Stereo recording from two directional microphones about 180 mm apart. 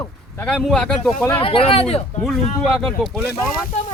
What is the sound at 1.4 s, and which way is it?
Speech, 30° left (ahead or behind).